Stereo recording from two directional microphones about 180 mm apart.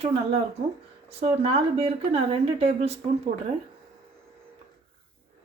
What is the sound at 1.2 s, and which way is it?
A woman's voice, 35° right (ahead or behind).